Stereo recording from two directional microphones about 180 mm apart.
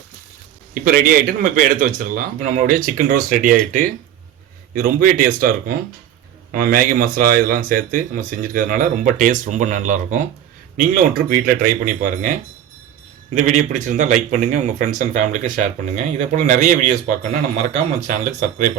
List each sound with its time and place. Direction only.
0.7 s speech: 50° right (ahead or behind)
18.0 s speech: 45° right (ahead or behind)